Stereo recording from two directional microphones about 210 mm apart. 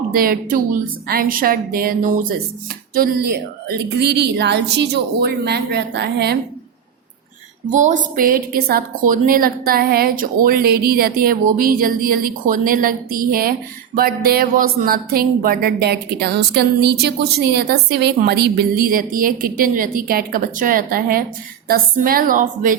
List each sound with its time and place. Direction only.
0.1 s a woman's voice: 45° right (ahead or behind)
7.7 s a woman's voice: 35° right (ahead or behind)